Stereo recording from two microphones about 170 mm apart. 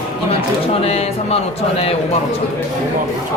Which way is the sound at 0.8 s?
35° left (ahead or behind).